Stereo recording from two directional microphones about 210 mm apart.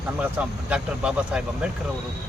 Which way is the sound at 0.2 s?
5° right (ahead or behind).